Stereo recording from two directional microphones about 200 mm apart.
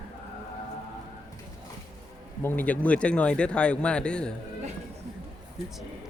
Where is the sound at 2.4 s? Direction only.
10° left (ahead or behind).